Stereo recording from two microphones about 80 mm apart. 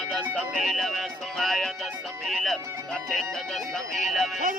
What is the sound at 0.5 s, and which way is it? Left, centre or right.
Music, centre.